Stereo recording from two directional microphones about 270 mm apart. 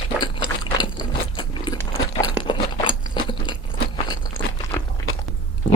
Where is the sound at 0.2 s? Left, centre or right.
Centre.